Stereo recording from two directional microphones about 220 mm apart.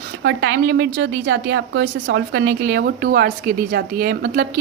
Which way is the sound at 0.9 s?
60° right (ahead or behind).